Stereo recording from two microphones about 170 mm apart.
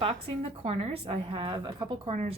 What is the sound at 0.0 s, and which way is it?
Speech, 35° right (ahead or behind).